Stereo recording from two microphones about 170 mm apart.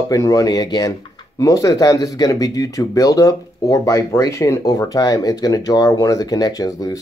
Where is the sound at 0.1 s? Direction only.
20° left (ahead or behind).